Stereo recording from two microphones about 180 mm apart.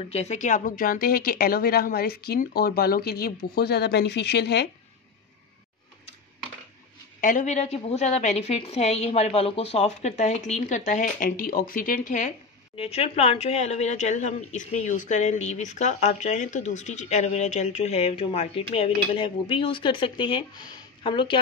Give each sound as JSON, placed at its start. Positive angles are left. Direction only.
{"t": 0.0, "sound": "a woman's voice", "side_deg": 35}
{"t": 7.2, "sound": "a woman's voice", "side_deg": 45}